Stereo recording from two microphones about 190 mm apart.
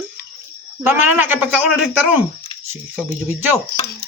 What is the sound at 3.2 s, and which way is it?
Speech, 10° right (ahead or behind).